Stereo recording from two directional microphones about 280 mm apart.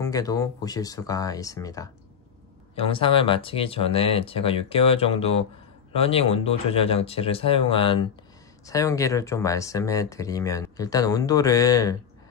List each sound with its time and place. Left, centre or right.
0.0 s speech: centre